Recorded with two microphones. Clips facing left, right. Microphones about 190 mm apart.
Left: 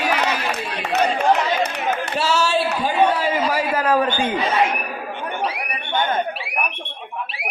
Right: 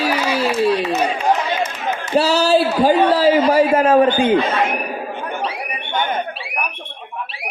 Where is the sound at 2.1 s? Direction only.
35° right (ahead or behind).